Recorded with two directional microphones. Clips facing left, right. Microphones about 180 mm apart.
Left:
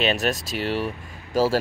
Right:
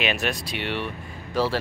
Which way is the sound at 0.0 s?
40° left (ahead or behind).